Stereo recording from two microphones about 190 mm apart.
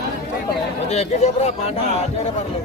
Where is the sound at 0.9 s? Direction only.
35° left (ahead or behind).